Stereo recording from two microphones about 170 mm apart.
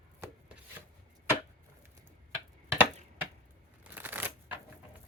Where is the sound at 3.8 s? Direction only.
10° right (ahead or behind).